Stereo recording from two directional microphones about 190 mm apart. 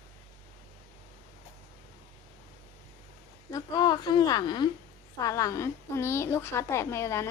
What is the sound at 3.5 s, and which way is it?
A woman's voice, 20° left (ahead or behind).